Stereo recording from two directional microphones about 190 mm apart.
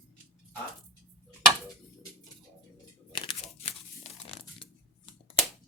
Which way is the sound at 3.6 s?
30° left (ahead or behind).